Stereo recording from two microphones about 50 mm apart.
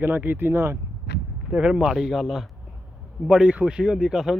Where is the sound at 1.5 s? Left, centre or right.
Centre.